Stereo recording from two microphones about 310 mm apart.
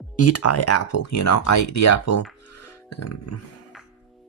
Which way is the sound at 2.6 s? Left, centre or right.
Left.